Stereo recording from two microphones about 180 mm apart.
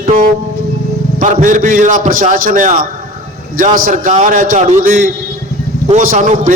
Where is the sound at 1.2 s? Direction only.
45° right (ahead or behind).